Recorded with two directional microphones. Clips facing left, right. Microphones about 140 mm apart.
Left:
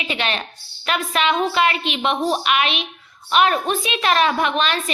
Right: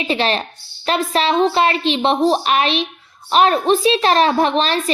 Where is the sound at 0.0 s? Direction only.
35° right (ahead or behind).